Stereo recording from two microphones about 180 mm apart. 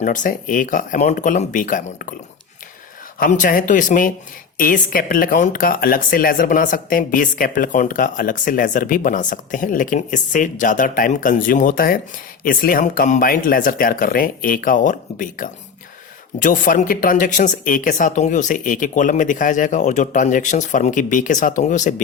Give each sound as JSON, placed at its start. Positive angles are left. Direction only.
{"t": 0.0, "sound": "speech", "side_deg": 45}
{"t": 3.2, "sound": "speech", "side_deg": 45}